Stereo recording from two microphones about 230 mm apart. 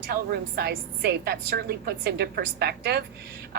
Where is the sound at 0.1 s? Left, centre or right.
Right.